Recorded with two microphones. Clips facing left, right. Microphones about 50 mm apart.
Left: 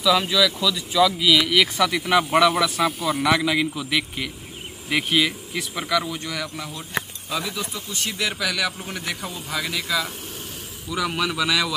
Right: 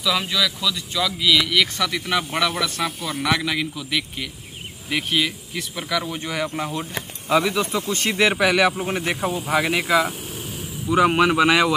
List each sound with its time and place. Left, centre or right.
0.0 s speech: centre
6.0 s speech: right
7.2 s speech: right